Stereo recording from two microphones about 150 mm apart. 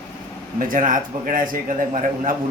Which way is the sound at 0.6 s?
65° right (ahead or behind).